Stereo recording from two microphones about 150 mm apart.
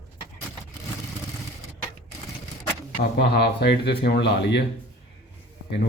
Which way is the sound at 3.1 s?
90° left.